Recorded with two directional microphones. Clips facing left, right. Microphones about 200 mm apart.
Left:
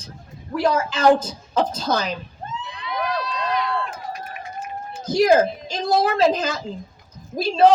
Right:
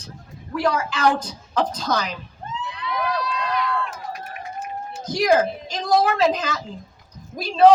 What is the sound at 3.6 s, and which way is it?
Run, 30° left (ahead or behind).